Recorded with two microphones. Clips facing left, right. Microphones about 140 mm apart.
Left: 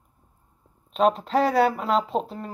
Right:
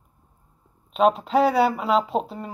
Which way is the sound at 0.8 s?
5° right (ahead or behind).